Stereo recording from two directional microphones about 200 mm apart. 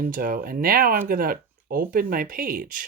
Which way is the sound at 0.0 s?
45° right (ahead or behind).